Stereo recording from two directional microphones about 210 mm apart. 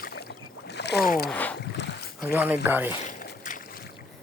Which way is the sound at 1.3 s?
5° left (ahead or behind).